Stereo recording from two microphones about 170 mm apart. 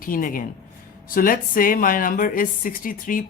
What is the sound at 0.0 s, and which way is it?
Speech, 55° left (ahead or behind).